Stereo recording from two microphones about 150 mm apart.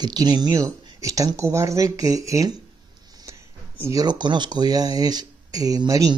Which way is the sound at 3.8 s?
20° right (ahead or behind).